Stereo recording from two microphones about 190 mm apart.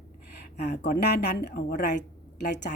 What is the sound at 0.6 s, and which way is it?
A woman's voice, 60° left (ahead or behind).